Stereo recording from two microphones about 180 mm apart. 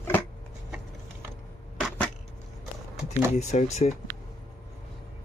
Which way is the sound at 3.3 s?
40° left (ahead or behind).